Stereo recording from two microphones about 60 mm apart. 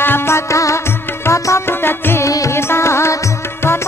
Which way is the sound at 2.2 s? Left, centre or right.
Left.